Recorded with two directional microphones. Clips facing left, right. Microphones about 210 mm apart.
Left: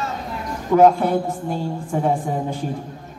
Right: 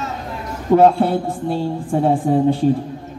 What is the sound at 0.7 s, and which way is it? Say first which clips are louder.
A woman's voice: right 2 dB; 35° right (ahead or behind).